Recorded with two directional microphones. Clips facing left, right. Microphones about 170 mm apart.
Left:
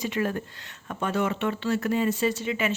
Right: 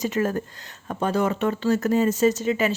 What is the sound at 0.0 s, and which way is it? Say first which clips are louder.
Speech: right 4 dB; 40° right (ahead or behind).